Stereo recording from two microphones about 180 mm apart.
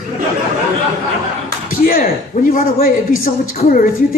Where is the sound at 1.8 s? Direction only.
50° left (ahead or behind).